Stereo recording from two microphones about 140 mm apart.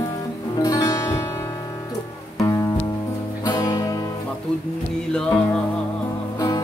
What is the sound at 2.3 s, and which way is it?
Music, 20° left (ahead or behind).